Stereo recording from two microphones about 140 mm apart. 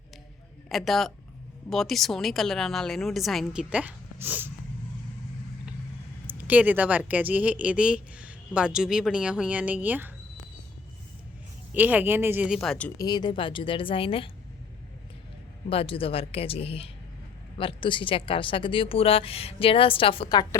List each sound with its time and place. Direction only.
0.7 s a woman's voice: centre (ahead or behind); by 4.5 s 15° right (ahead or behind)
6.2 s speech: 10° right (ahead or behind)
11.7 s speech: 10° right (ahead or behind)
12.5 s a woman's voice: centre (ahead or behind)
13.0 s speech: 30° left (ahead or behind)
15.7 s speech: 40° left (ahead or behind)